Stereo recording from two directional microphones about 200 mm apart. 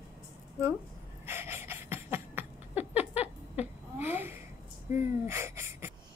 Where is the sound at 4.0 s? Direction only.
10° right (ahead or behind).